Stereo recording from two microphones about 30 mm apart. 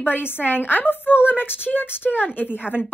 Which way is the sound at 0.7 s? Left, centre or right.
Left.